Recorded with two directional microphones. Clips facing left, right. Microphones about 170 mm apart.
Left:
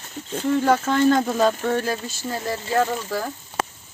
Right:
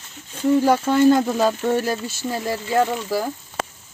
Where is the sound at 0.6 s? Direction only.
10° right (ahead or behind).